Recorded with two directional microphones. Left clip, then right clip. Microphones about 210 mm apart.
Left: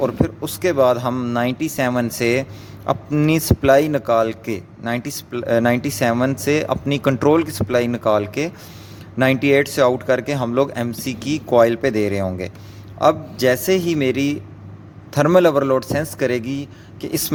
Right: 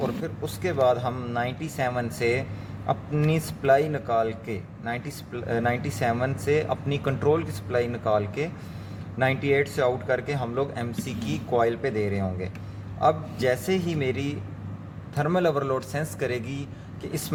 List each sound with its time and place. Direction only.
0.4 s a man's voice: 45° left (ahead or behind)